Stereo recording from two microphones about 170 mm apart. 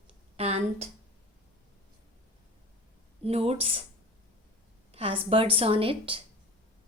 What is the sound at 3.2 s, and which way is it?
Speech, 35° right (ahead or behind).